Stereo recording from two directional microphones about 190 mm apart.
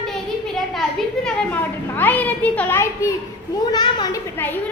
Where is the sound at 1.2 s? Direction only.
10° left (ahead or behind).